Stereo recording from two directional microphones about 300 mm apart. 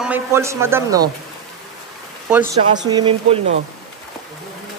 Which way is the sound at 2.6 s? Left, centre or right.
Centre.